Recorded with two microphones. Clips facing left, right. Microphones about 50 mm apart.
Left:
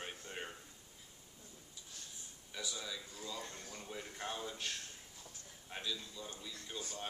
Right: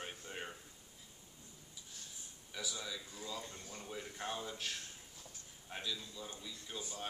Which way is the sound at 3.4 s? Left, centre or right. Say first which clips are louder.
Left 1 dB; left.